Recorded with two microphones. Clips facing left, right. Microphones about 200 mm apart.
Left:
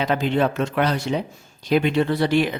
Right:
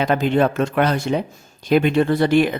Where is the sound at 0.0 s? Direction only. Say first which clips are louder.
Right 3 dB; 50° right (ahead or behind).